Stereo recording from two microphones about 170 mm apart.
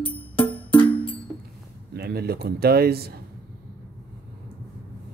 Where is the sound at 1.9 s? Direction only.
70° right (ahead or behind).